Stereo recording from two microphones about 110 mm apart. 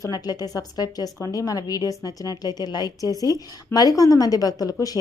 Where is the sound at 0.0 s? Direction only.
35° left (ahead or behind).